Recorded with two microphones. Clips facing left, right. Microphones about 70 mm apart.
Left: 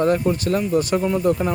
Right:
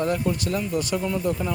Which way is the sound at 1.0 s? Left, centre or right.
Left.